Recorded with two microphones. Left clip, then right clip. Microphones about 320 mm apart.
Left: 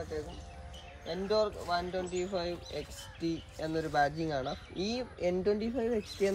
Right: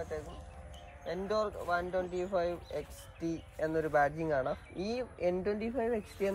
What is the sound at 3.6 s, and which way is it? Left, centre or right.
Speech, centre.